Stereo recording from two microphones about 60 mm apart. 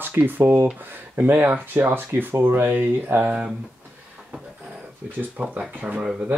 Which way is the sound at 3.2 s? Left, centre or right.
Centre.